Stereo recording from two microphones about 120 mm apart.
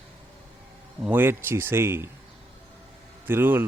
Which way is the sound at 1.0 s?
15° right (ahead or behind).